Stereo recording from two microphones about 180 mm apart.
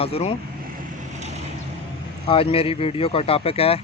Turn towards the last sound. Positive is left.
turn(degrees=35)  # may be behind; listen again after turning